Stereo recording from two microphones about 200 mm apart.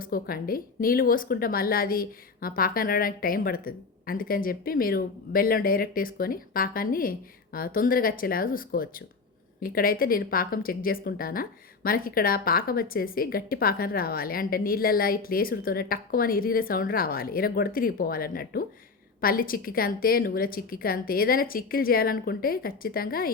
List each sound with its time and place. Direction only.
0.0 s speech: 45° left (ahead or behind)